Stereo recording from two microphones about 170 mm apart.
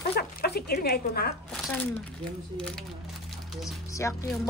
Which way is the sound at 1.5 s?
5° left (ahead or behind).